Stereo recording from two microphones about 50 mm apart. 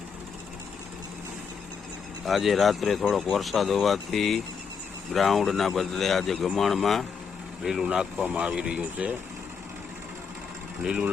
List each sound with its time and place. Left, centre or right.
2.2 s speech: centre
7.6 s speech: centre
8.2 s speech: right